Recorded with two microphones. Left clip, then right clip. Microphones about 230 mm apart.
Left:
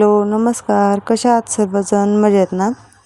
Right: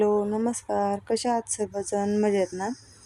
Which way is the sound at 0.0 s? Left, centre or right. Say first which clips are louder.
Left 11 dB; left.